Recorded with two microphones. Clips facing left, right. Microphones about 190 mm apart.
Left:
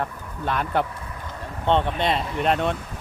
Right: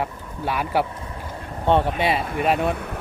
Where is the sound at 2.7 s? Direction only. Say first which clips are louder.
Right 4 dB; 60° right (ahead or behind).